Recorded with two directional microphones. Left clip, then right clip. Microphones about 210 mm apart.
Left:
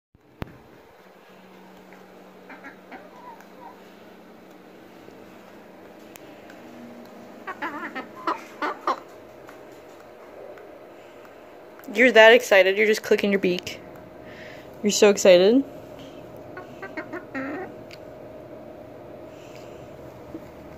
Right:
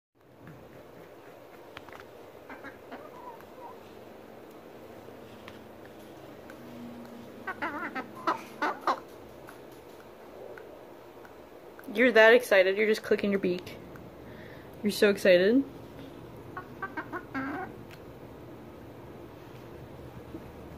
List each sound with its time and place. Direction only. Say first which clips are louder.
7.4 s chicken: left 3 dB; 15° right (ahead or behind)
11.9 s speech: left 6 dB; 15° left (ahead or behind)
14.8 s speech: left 8 dB; 15° left (ahead or behind)
17.3 s a sound: left 5 dB; 20° right (ahead or behind)